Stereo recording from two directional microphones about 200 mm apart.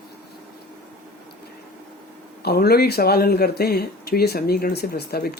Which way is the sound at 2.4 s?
50° left (ahead or behind).